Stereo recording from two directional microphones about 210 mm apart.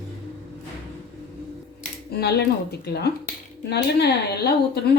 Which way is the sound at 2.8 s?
50° left (ahead or behind).